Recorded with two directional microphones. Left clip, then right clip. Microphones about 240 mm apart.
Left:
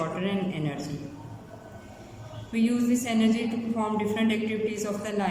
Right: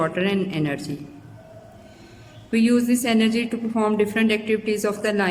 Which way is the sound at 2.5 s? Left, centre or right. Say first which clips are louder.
Right 6 dB; right.